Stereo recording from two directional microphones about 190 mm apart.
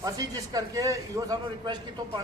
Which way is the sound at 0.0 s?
20° right (ahead or behind).